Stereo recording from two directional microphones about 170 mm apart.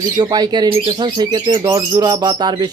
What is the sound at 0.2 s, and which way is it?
Speech, 25° right (ahead or behind).